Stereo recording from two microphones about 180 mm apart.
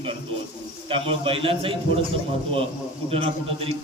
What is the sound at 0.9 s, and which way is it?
A man's voice, 30° right (ahead or behind).